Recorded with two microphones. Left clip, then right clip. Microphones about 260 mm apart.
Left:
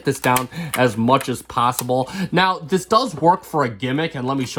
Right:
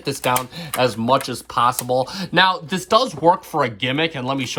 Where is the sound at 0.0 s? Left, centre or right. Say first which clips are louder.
Left 2 dB; left.